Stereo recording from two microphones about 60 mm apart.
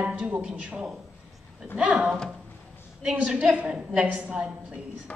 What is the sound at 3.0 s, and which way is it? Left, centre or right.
A woman's voice, centre.